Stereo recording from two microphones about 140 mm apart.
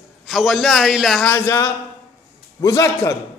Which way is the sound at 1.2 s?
20° left (ahead or behind).